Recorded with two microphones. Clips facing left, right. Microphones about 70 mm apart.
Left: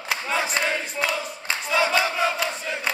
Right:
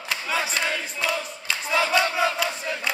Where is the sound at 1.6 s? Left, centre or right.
Centre.